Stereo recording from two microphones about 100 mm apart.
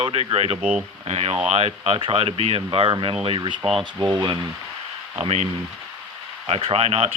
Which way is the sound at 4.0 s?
45° right (ahead or behind).